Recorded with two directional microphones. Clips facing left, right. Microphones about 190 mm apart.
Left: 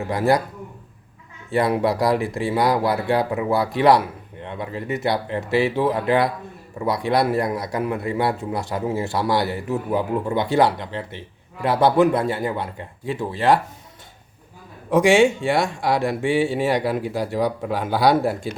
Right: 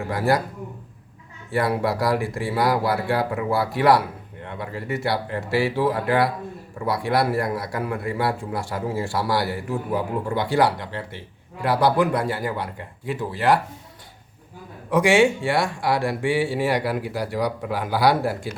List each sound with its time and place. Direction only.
0.1 s speech: 20° left (ahead or behind)
1.5 s speech: 20° left (ahead or behind)
14.8 s speech: 25° left (ahead or behind)